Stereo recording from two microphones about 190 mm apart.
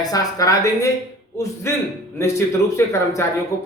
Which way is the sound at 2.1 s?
15° left (ahead or behind).